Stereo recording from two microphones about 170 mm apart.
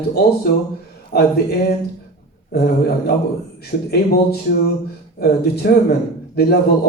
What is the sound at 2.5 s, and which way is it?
Speech, 65° left (ahead or behind).